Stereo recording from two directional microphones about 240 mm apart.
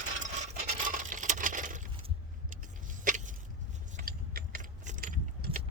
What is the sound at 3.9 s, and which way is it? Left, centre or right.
Keys jangling, right.